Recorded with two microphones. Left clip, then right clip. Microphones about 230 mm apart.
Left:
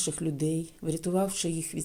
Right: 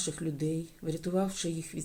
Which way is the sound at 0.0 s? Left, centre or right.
Left.